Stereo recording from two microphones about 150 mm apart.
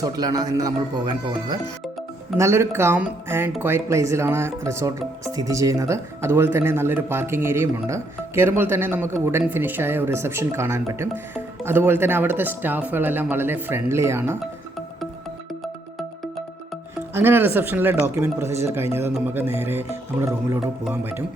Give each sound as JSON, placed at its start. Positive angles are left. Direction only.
{"t": 0.0, "sound": "speech", "side_deg": -25}
{"t": 2.4, "sound": "speech", "side_deg": -20}
{"t": 17.2, "sound": "speech", "side_deg": -15}